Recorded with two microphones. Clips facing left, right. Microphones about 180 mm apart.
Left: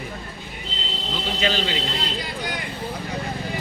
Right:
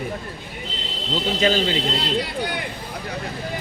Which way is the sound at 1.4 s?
40° right (ahead or behind).